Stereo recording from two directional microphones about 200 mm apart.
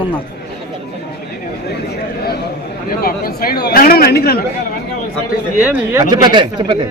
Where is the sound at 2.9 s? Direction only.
50° left (ahead or behind).